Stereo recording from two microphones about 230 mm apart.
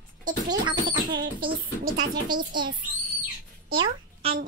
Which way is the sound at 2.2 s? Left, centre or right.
Centre.